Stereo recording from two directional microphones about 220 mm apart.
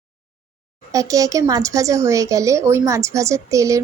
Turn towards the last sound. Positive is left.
turn(degrees=-15)  # may be behind; listen again after turning